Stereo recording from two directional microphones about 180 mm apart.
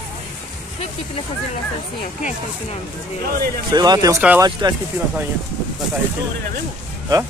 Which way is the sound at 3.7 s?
25° right (ahead or behind).